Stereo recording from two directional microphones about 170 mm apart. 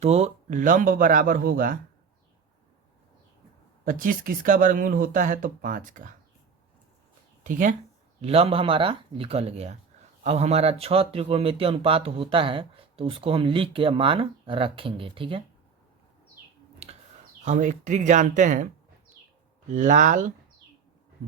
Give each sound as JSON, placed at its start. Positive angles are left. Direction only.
{"t": 0.0, "sound": "speech", "side_deg": -40}
{"t": 3.8, "sound": "speech", "side_deg": -55}
{"t": 7.4, "sound": "speech", "side_deg": -50}
{"t": 8.2, "sound": "speech", "side_deg": -35}
{"t": 16.8, "sound": "a sound", "side_deg": -40}
{"t": 17.4, "sound": "speech", "side_deg": -45}
{"t": 19.7, "sound": "speech", "side_deg": -45}